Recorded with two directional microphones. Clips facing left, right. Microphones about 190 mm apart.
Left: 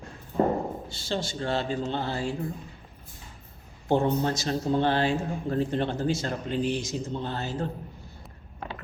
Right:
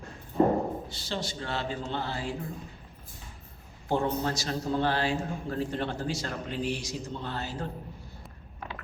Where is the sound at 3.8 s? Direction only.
25° left (ahead or behind).